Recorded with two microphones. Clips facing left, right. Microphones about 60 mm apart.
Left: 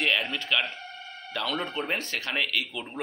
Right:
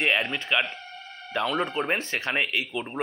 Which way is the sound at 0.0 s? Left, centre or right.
Right.